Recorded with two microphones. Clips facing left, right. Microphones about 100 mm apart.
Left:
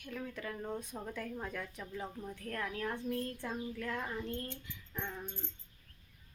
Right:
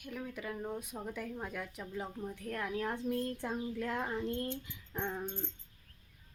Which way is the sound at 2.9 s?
Centre (ahead or behind).